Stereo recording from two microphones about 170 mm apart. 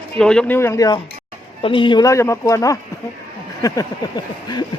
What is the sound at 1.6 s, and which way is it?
Speech, 30° left (ahead or behind).